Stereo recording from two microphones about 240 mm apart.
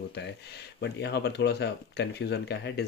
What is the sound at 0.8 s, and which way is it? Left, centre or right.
Speech, left.